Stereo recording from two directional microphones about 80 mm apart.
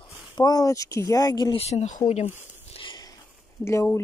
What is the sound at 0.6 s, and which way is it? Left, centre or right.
Speech, left.